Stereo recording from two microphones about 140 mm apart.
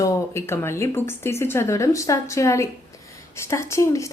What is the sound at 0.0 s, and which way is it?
A woman's voice, 20° left (ahead or behind).